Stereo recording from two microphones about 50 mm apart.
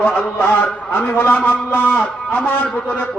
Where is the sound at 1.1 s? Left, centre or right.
Left.